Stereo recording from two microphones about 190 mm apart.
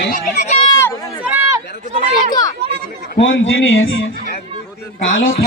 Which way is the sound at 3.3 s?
90° left.